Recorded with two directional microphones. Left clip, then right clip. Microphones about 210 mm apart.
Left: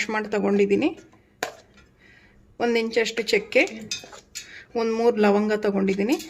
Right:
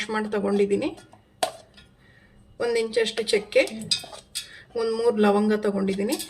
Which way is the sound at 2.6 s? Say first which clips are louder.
Left 1 dB; 35° left (ahead or behind).